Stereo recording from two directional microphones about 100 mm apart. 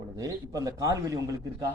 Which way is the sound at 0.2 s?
35° right (ahead or behind).